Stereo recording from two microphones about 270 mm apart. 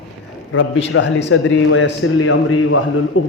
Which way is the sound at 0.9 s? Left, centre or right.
Left.